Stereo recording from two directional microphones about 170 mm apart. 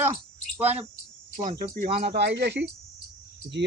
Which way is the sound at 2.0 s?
75° right (ahead or behind).